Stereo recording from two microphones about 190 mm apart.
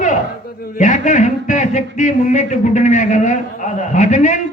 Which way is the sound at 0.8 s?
40° left (ahead or behind).